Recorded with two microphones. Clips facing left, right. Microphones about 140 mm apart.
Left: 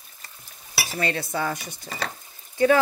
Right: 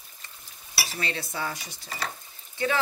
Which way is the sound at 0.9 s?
50° left (ahead or behind).